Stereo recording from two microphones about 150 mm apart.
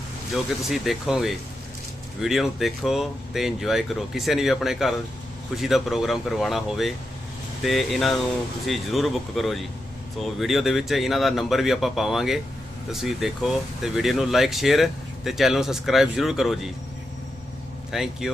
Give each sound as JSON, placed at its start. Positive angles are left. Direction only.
{"t": 0.7, "sound": "speech", "side_deg": 0}
{"t": 17.9, "sound": "speech", "side_deg": 0}